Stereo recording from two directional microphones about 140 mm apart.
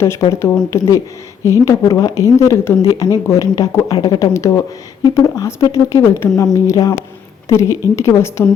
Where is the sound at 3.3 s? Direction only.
25° left (ahead or behind).